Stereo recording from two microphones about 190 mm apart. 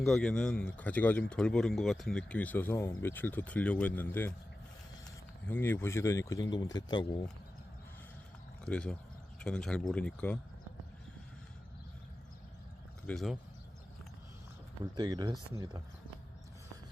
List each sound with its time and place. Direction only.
0.0 s speech: centre (ahead or behind)
5.5 s speech: 10° left (ahead or behind)
8.6 s speech: 5° left (ahead or behind)
13.1 s speech: centre (ahead or behind)
14.9 s speech: 20° right (ahead or behind)